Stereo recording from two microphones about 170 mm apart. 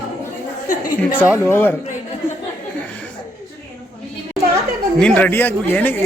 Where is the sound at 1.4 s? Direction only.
10° left (ahead or behind).